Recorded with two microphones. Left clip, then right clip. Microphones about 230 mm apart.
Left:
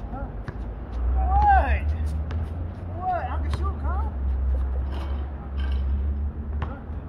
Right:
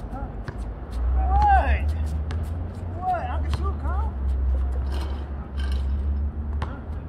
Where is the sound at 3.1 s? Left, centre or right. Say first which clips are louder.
Even; centre.